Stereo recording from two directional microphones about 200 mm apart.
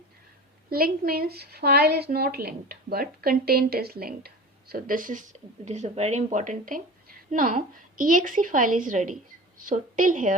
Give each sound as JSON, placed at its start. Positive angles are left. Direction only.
{"t": 0.7, "sound": "a woman's voice", "side_deg": -50}